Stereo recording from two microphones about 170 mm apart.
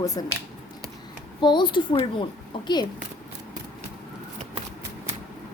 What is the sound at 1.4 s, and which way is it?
A woman's voice, 25° left (ahead or behind).